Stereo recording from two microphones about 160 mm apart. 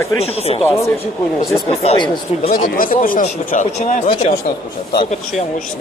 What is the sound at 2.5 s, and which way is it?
Speech, 65° left (ahead or behind).